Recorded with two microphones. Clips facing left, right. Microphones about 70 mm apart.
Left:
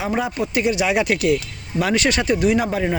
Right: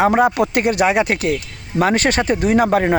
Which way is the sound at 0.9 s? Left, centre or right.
Right.